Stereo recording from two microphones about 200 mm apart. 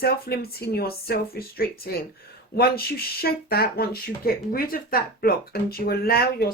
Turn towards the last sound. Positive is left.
turn(degrees=50)  # may be behind; listen again after turning